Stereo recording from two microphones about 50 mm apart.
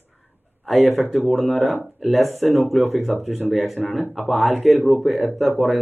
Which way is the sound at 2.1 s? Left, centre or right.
Centre.